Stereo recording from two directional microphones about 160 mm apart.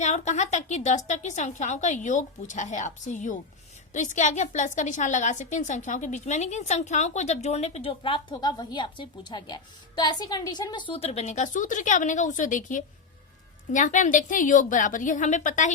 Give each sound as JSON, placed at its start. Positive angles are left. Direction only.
{"t": 0.0, "sound": "a woman's voice", "side_deg": 45}